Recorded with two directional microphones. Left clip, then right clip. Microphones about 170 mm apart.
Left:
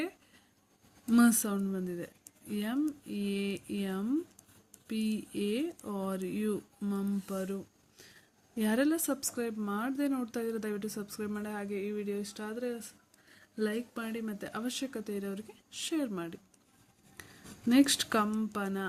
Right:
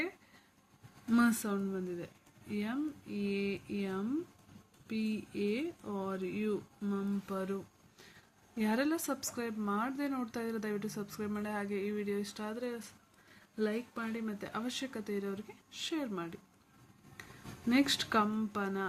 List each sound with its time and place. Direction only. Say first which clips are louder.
1.1 s speech: left 4 dB; 40° left (ahead or behind)
13.6 s speech: left 1 dB; 40° left (ahead or behind)
17.2 s a sound: even; 35° left (ahead or behind)
17.7 s speech: left 4 dB; 35° left (ahead or behind)